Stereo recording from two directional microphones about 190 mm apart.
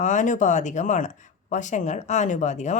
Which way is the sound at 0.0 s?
40° left (ahead or behind).